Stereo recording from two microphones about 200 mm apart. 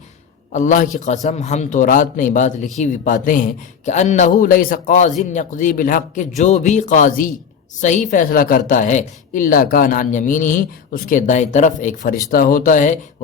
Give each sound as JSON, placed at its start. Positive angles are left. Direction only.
{"t": 0.5, "sound": "a woman's voice", "side_deg": 40}